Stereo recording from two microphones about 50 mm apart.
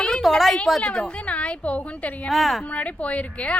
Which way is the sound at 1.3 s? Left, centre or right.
Left.